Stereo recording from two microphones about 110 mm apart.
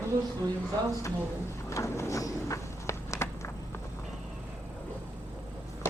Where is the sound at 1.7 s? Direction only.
25° left (ahead or behind).